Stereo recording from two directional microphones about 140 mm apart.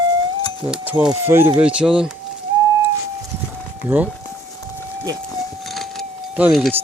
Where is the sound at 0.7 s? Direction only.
10° right (ahead or behind).